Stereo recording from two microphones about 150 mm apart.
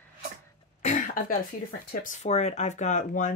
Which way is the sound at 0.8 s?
50° left (ahead or behind).